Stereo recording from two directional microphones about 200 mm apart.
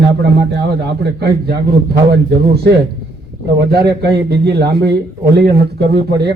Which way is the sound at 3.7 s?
55° right (ahead or behind).